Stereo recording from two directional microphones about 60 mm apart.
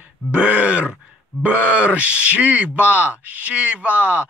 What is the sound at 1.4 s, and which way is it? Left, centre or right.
A man's voice, right.